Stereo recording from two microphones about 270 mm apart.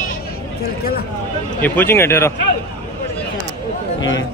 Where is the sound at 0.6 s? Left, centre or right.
Left.